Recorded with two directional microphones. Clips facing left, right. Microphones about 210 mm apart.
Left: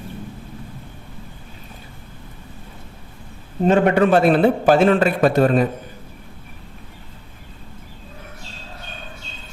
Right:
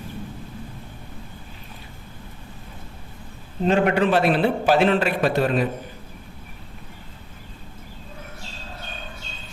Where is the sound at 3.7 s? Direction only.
50° left (ahead or behind).